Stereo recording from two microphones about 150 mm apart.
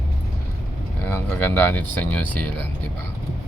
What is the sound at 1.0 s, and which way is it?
Speech, 15° left (ahead or behind).